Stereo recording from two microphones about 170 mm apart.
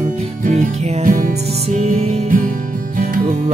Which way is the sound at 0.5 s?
45° right (ahead or behind).